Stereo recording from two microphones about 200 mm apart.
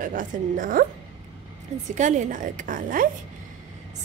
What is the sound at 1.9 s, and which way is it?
A woman's voice, 35° right (ahead or behind).